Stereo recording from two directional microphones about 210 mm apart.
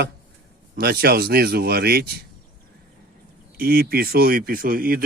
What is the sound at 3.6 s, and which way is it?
Speech, 45° right (ahead or behind).